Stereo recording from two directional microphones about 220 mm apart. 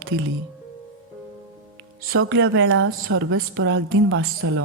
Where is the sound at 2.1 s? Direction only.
65° right (ahead or behind).